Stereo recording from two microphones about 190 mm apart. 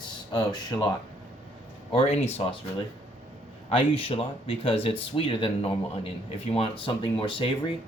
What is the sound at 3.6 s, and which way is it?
Speech, 30° left (ahead or behind).